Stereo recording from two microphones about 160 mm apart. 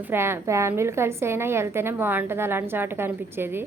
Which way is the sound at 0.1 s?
15° right (ahead or behind).